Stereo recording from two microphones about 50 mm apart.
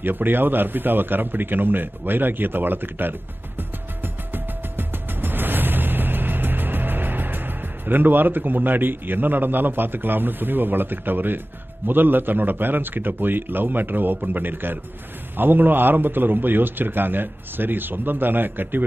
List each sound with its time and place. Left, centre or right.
0.0 s a man's voice: right